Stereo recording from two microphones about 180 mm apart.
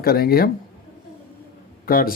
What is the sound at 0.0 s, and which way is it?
Speech, 55° left (ahead or behind).